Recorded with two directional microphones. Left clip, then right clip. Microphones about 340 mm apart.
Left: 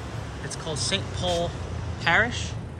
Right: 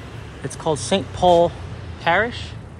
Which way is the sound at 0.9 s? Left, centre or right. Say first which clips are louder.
Right 13 dB; centre.